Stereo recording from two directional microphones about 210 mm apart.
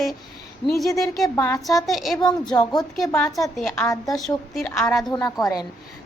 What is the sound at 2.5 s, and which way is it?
Speech, 20° left (ahead or behind).